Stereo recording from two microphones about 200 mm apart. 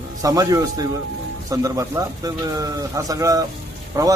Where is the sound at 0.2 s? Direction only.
15° right (ahead or behind).